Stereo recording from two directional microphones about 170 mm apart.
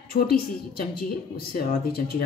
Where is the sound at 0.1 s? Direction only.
60° left (ahead or behind).